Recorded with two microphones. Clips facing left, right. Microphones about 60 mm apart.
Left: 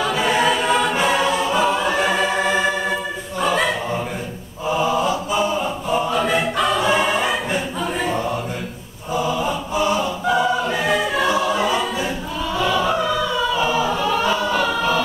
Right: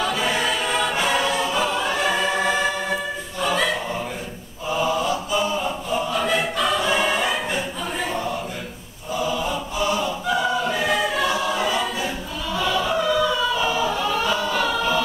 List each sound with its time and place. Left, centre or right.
0.0 s choir: centre
4.7 s chant: centre
6.1 s choir: centre
6.5 s music: centre
8.0 s a sound: centre
9.2 s chant: left
10.2 s choir: centre